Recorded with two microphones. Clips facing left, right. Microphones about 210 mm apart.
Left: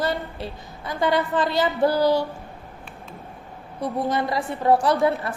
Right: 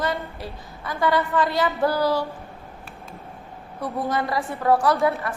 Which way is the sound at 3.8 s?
20° left (ahead or behind).